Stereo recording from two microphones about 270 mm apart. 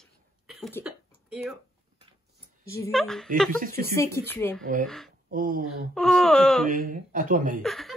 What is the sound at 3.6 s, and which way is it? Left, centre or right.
Dog, right.